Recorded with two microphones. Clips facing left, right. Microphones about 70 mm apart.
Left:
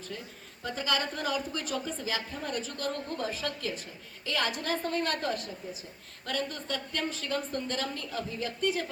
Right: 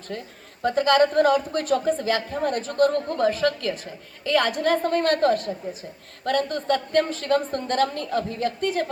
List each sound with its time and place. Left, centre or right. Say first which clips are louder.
0.1 s a woman's voice: right 7 dB; right